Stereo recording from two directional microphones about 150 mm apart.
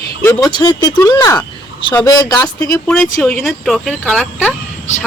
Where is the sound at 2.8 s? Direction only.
10° left (ahead or behind).